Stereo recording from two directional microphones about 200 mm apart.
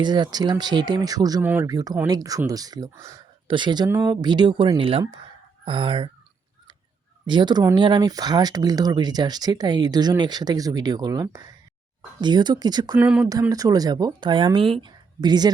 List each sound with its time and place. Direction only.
0.0 s speech: 20° right (ahead or behind)
7.3 s speech: 20° right (ahead or behind)
13.0 s speech: 5° right (ahead or behind)
13.2 s a woman's voice: 15° right (ahead or behind)